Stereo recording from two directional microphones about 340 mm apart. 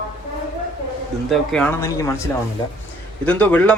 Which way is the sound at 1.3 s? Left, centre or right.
Centre.